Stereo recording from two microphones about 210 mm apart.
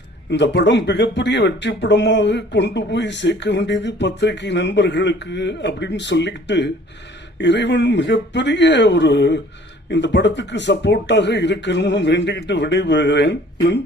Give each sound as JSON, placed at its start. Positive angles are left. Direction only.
{"t": 0.3, "sound": "speech", "side_deg": 55}